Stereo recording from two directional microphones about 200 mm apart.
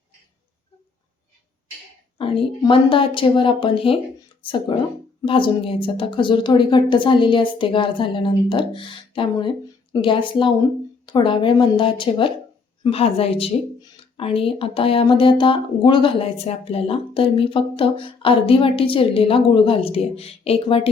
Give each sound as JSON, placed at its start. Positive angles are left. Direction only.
{"t": 2.1, "sound": "speech", "side_deg": 25}